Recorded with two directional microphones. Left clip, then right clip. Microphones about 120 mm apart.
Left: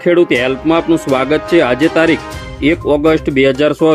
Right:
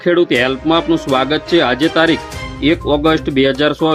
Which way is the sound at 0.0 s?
30° left (ahead or behind).